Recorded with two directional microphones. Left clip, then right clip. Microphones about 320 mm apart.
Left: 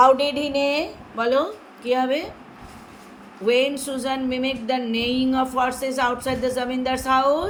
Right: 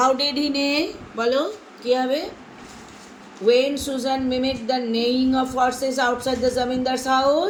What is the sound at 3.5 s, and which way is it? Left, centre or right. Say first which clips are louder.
Speech: right 2 dB; centre.